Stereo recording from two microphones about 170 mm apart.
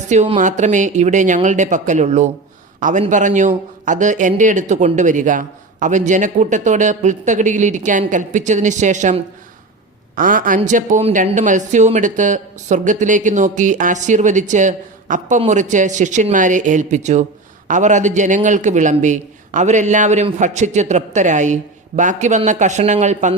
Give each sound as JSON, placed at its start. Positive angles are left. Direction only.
{"t": 0.1, "sound": "a man's voice", "side_deg": -45}